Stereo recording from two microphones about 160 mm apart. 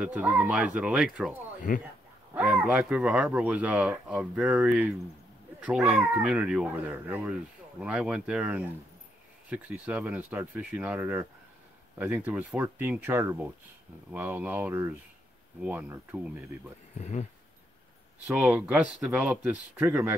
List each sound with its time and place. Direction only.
0.0 s speech: 10° right (ahead or behind)
1.7 s speech: 55° left (ahead or behind)
2.3 s speech: 5° right (ahead or behind)
17.0 s a sound: 45° left (ahead or behind)
18.2 s speech: 10° right (ahead or behind)